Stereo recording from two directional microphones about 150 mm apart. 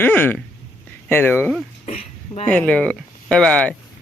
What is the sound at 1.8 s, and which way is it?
Speech, 45° left (ahead or behind).